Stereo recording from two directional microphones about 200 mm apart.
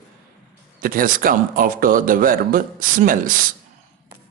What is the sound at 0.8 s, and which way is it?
A man's voice, 45° right (ahead or behind).